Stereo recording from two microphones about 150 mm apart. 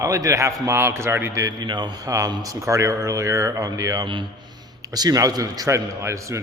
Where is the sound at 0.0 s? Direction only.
20° right (ahead or behind).